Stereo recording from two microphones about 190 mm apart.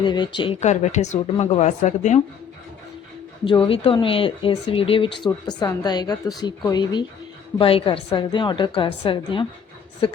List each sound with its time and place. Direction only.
0.0 s speech: 25° left (ahead or behind)
3.4 s speech: 25° left (ahead or behind)